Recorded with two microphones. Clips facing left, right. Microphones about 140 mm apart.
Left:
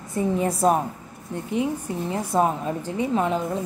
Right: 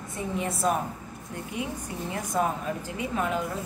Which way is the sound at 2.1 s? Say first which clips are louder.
Left 5 dB; 30° left (ahead or behind).